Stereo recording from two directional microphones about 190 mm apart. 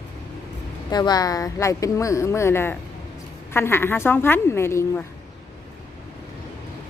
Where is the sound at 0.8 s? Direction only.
20° left (ahead or behind).